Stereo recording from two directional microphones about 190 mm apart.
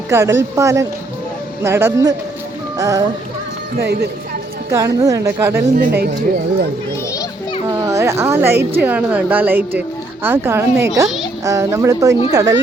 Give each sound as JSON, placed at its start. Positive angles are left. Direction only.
{"t": 0.1, "sound": "speech", "side_deg": -15}
{"t": 4.7, "sound": "speech", "side_deg": -15}
{"t": 5.7, "sound": "speech", "side_deg": -60}
{"t": 7.1, "sound": "children playing", "side_deg": 20}
{"t": 7.7, "sound": "a sound", "side_deg": -15}
{"t": 8.7, "sound": "speech", "side_deg": -10}